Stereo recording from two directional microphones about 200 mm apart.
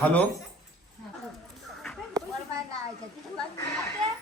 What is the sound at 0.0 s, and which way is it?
Speech, 10° left (ahead or behind).